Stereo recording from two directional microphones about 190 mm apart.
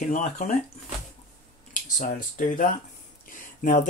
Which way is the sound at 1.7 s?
45° left (ahead or behind).